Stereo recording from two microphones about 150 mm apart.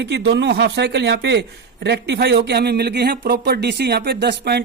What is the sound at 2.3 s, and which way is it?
Speech, 90° right.